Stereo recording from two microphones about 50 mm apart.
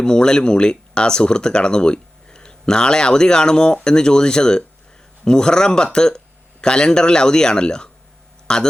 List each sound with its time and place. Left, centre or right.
0.0 s speech: centre